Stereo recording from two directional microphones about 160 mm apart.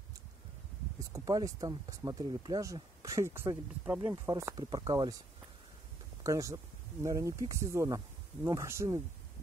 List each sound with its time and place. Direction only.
0.9 s speech: 20° right (ahead or behind)
6.2 s speech: 20° right (ahead or behind)